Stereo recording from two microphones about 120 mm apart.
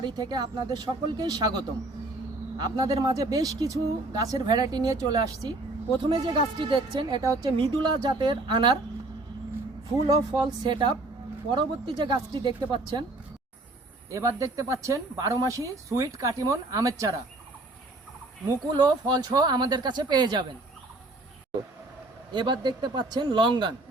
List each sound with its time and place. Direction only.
0.0 s speech: 35° right (ahead or behind)
2.6 s speech: 35° right (ahead or behind)
10.1 s speech: 35° right (ahead or behind)
14.1 s speech: 25° right (ahead or behind)
18.4 s speech: 30° right (ahead or behind)
22.3 s speech: 40° right (ahead or behind)